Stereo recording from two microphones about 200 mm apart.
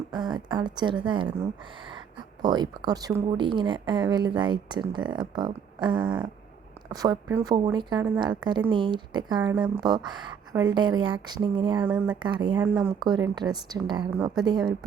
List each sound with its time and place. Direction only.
0.1 s speech: 20° right (ahead or behind)
9.5 s speech: 10° right (ahead or behind)
9.8 s speech: 20° right (ahead or behind)
11.8 s speech: 10° right (ahead or behind)
12.2 s speech: 25° right (ahead or behind)
12.5 s speech: 10° right (ahead or behind)
13.0 s speech: 20° right (ahead or behind)